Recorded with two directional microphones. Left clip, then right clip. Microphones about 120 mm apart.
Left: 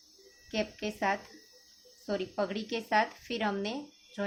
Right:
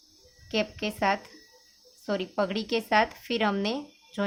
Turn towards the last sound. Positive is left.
turn(degrees=-45)  # may be behind; listen again after turning